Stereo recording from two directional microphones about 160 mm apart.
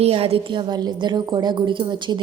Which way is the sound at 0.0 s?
40° right (ahead or behind).